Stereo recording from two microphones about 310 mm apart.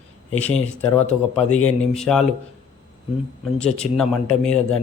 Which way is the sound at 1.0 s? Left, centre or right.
Left.